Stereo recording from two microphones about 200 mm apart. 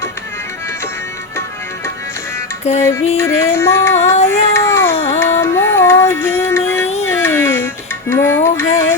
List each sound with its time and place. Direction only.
2.7 s music: 35° left (ahead or behind)
3.2 s music: 15° left (ahead or behind)
4.3 s cat: 15° left (ahead or behind)
5.2 s music: 10° left (ahead or behind)
8.1 s a sound: 10° left (ahead or behind)